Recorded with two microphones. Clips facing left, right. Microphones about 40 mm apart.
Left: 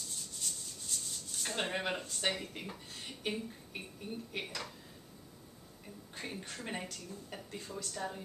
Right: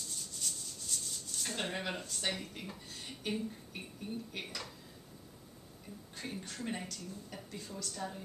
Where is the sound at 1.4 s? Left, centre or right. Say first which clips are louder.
Left 2 dB; centre.